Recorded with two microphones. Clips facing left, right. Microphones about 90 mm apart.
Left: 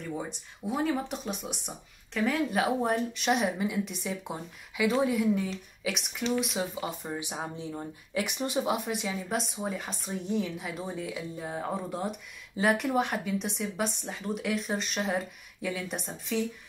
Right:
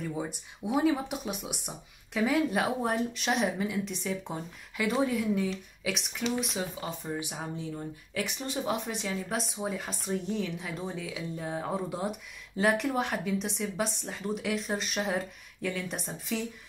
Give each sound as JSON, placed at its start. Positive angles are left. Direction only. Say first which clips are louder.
{"t": 0.8, "sound": "a woman's voice", "louder": "right 2 dB", "side_deg": -5}
{"t": 6.8, "sound": "speech", "louder": "even", "side_deg": 20}
{"t": 8.8, "sound": "a woman's voice", "louder": "left 1 dB", "side_deg": 5}